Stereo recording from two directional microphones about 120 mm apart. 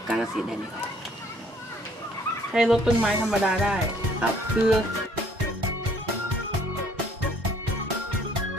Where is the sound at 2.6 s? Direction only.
5° right (ahead or behind).